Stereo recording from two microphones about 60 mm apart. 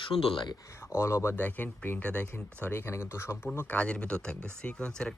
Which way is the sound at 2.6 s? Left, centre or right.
Left.